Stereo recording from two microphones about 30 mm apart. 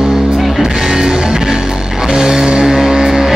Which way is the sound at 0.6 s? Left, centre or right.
Centre.